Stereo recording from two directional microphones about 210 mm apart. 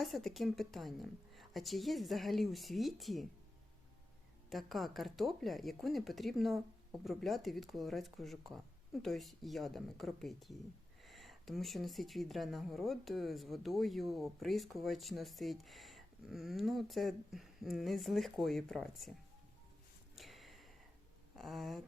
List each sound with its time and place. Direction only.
0.0 s speech: centre (ahead or behind)
4.4 s speech: centre (ahead or behind)
20.1 s a sound: centre (ahead or behind)
21.3 s speech: centre (ahead or behind)